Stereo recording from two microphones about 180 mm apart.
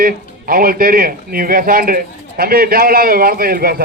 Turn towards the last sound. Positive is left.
turn(degrees=-55)  # may be behind; listen again after turning